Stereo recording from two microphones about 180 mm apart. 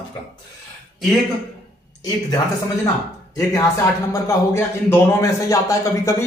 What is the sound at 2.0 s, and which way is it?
Speech, 20° left (ahead or behind).